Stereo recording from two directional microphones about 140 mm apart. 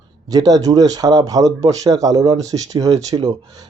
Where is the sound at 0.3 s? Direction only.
25° right (ahead or behind).